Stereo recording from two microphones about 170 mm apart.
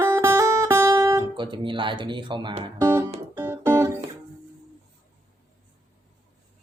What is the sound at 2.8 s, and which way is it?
Music, 15° right (ahead or behind).